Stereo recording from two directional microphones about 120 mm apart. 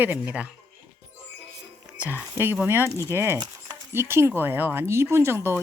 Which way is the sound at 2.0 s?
15° right (ahead or behind).